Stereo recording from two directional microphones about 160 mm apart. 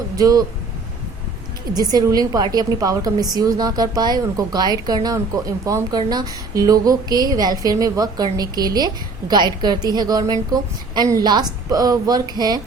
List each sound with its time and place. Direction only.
0.2 s a woman's voice: 25° right (ahead or behind)
1.7 s a woman's voice: 25° right (ahead or behind)